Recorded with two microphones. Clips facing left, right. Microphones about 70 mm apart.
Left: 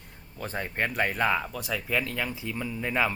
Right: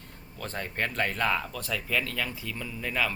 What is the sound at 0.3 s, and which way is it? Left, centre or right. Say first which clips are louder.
Speech: left 2 dB; centre.